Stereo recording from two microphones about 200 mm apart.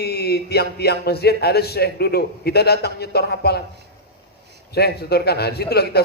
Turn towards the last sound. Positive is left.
turn(degrees=55)  # may be behind; listen again after turning